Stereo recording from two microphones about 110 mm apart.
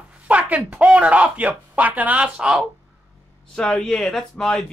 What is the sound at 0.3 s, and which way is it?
Speech, 15° right (ahead or behind).